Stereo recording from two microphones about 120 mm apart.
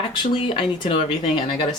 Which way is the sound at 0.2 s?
45° left (ahead or behind).